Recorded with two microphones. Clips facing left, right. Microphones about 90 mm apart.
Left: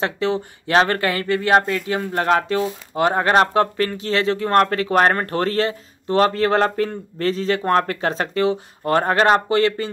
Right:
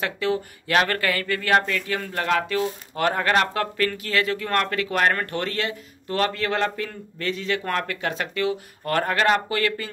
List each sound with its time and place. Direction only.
0.0 s speech: 30° left (ahead or behind)